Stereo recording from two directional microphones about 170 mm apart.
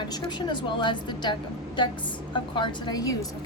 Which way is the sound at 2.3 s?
25° left (ahead or behind).